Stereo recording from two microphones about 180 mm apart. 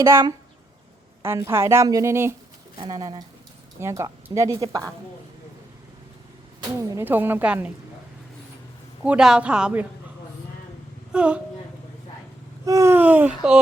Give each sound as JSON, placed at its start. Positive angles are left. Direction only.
{"t": 0.0, "sound": "a woman's voice", "side_deg": -15}
{"t": 6.7, "sound": "a woman's voice", "side_deg": -15}
{"t": 9.0, "sound": "a woman's voice", "side_deg": -5}
{"t": 11.1, "sound": "a sound", "side_deg": -5}
{"t": 12.6, "sound": "a woman's voice", "side_deg": -15}